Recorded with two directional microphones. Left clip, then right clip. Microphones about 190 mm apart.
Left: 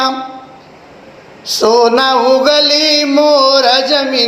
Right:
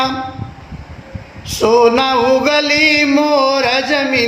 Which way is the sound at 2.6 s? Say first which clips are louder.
Left 1 dB; 50° right (ahead or behind).